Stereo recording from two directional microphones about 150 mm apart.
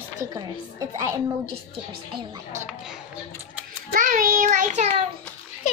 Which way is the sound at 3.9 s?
65° right (ahead or behind).